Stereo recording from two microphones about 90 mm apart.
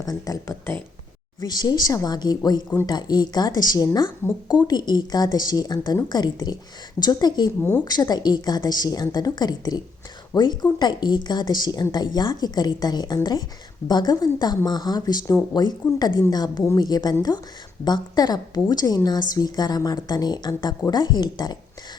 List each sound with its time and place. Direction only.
0.0 s speech: 40° left (ahead or behind)